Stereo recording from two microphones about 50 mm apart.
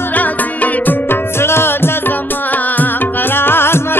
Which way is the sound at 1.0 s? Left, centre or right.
Left.